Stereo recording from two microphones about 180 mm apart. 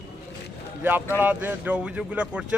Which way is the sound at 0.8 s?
10° right (ahead or behind).